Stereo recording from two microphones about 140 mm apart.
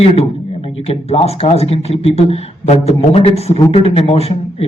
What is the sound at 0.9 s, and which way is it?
A man's voice, 45° left (ahead or behind).